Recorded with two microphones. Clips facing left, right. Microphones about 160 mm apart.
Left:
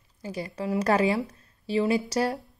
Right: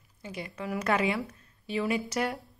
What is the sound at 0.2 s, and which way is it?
A woman's voice, 35° left (ahead or behind).